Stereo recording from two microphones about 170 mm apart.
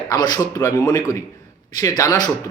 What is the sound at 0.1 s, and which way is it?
A man's voice, 20° left (ahead or behind).